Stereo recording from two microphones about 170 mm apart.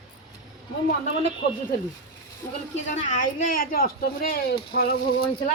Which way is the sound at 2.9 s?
45° left (ahead or behind).